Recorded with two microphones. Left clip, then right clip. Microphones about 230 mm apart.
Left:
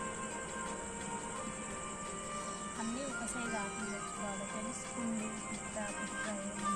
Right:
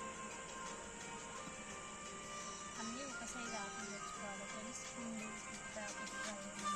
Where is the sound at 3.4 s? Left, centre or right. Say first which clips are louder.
Left 7 dB; centre.